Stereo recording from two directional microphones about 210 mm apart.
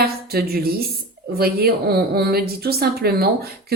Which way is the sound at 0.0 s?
45° right (ahead or behind).